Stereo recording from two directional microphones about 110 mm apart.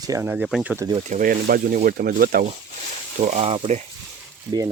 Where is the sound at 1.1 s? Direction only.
90° right.